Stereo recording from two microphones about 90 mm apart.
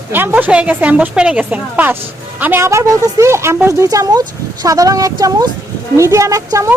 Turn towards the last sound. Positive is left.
turn(degrees=-40)  # may be behind; listen again after turning